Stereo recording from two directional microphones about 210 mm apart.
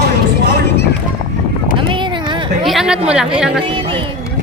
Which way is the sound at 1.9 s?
20° right (ahead or behind).